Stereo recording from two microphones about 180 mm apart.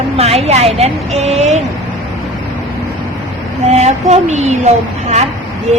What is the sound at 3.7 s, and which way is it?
Speech, 35° right (ahead or behind).